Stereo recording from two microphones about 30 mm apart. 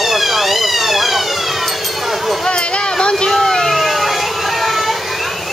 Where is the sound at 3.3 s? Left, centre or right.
Centre.